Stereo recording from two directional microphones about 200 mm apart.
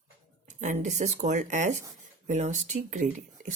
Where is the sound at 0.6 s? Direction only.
40° right (ahead or behind).